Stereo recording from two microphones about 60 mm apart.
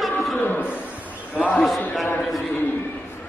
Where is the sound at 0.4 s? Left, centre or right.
Left.